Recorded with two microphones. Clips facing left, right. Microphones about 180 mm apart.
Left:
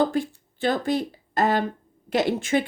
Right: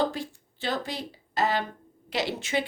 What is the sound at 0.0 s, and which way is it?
A woman's voice, 50° left (ahead or behind).